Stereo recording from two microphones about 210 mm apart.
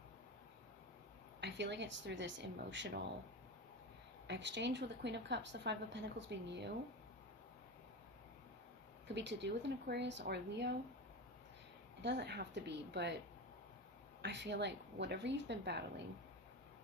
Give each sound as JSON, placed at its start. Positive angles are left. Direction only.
{"t": 1.4, "sound": "a woman's voice", "side_deg": -55}
{"t": 4.3, "sound": "a woman's voice", "side_deg": -55}
{"t": 9.1, "sound": "a woman's voice", "side_deg": -55}
{"t": 12.0, "sound": "speech", "side_deg": -55}
{"t": 14.2, "sound": "a woman's voice", "side_deg": -55}